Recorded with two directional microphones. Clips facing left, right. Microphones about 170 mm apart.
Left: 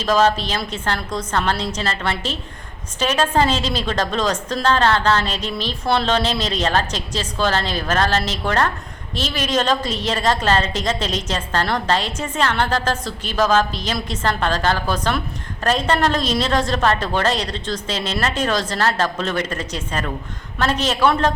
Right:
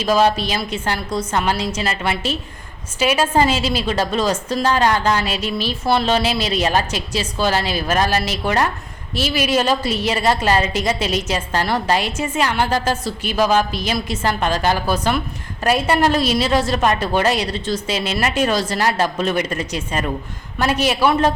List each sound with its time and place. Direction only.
0.0 s a woman's voice: 10° right (ahead or behind)